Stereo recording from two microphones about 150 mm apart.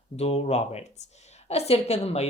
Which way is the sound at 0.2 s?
45° left (ahead or behind).